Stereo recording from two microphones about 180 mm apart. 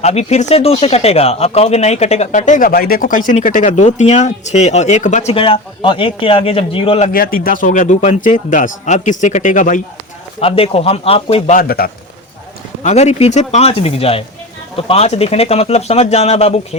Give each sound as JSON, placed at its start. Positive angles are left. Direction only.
{"t": 0.0, "sound": "speech", "side_deg": 35}
{"t": 7.1, "sound": "speech", "side_deg": 55}
{"t": 10.4, "sound": "speech", "side_deg": 30}
{"t": 11.5, "sound": "a man's voice", "side_deg": 55}
{"t": 12.8, "sound": "speech", "side_deg": 40}